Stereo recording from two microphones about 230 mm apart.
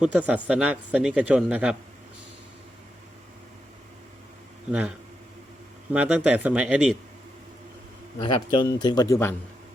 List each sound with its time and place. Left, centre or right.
0.0 s a man's voice: centre
5.9 s a man's voice: centre
8.2 s speech: centre